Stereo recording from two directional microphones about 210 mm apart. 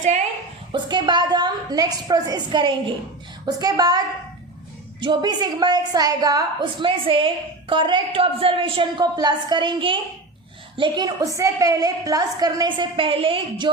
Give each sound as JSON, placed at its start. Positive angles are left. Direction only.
{"t": 0.7, "sound": "a woman's voice", "side_deg": -20}